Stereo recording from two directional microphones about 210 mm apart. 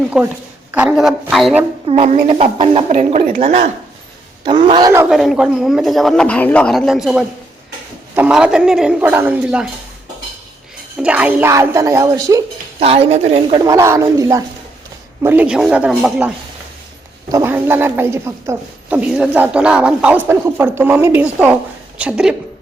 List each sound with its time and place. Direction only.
0.1 s a man's voice: 5° right (ahead or behind)
1.9 s a woman's voice: 30° right (ahead or behind)
4.9 s a woman's voice: 10° right (ahead or behind)
5.1 s a man's voice: centre (ahead or behind)
11.0 s a woman's voice: 5° right (ahead or behind)
12.8 s speech: 30° right (ahead or behind)
13.7 s a woman's voice: 15° right (ahead or behind)
17.3 s a woman's voice: 10° right (ahead or behind)